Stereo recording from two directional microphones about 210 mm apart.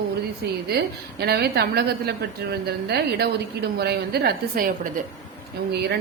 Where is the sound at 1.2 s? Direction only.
50° right (ahead or behind).